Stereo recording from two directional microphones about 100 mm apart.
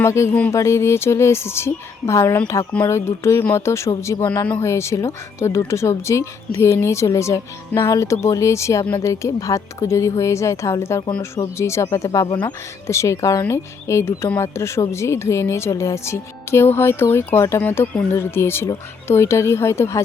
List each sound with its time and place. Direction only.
0.0 s speech: 30° left (ahead or behind)
17.6 s speech: 15° left (ahead or behind)
18.1 s speech: 25° left (ahead or behind)